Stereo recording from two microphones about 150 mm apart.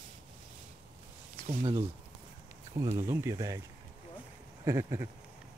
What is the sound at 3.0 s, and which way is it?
Speech, 20° right (ahead or behind).